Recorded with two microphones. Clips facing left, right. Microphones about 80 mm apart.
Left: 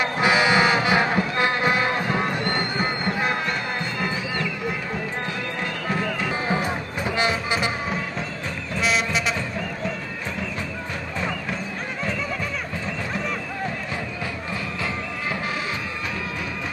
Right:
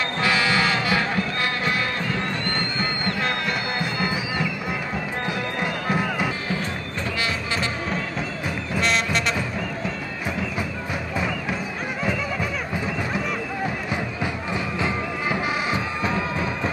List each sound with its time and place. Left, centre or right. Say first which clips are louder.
0.0 s music: left 3 dB; centre
3.4 s music: right 1 dB; centre
5.6 s music: right 2 dB; centre
7.2 s music: left 4 dB; centre
8.7 s music: even; centre
14.2 s music: right 3 dB; centre